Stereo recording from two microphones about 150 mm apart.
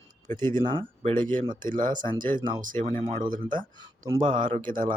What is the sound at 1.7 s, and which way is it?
Speech, 60° right (ahead or behind).